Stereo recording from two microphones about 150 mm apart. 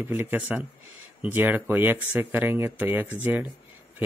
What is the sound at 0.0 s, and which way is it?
Speech, 15° right (ahead or behind).